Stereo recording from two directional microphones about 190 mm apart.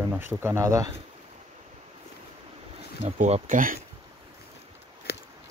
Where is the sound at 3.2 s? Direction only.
40° right (ahead or behind).